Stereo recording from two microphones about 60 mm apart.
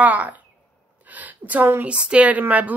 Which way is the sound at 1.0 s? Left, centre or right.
Right.